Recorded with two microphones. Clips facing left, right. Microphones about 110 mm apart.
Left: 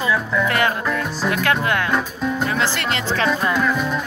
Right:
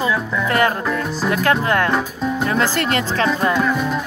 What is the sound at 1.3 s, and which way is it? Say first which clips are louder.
Speech: right 3 dB; 35° right (ahead or behind).